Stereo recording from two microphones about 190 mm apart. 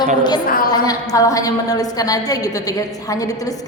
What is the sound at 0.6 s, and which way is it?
A woman's voice, 20° left (ahead or behind).